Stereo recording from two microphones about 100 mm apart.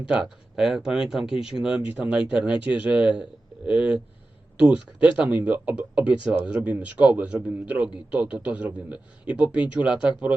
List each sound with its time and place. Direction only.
0.1 s a man's voice: 5° right (ahead or behind)